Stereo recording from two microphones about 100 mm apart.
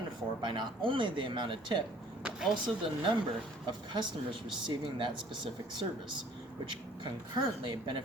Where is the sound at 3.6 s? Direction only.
50° right (ahead or behind).